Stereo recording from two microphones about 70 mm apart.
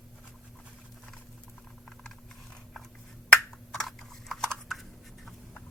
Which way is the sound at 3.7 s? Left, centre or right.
Centre.